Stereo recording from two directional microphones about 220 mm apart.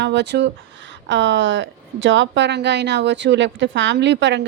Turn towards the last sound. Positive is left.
turn(degrees=-55)  # may be behind; listen again after turning